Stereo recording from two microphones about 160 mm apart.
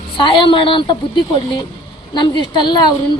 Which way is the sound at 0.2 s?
30° left (ahead or behind).